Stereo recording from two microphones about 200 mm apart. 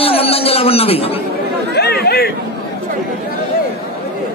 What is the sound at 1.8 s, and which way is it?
Chatter, 55° left (ahead or behind).